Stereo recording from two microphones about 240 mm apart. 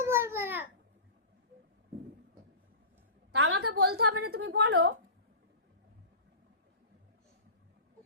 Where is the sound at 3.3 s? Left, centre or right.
Right.